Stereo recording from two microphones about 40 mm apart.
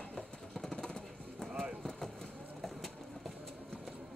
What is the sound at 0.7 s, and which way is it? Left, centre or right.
Music, centre.